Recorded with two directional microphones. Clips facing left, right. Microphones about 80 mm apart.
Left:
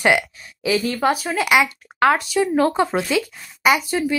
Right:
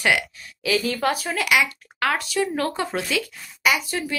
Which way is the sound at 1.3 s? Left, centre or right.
Left.